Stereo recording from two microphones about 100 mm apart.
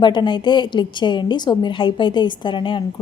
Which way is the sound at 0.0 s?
50° left (ahead or behind).